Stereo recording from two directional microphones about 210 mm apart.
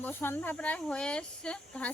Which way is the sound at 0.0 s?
10° left (ahead or behind).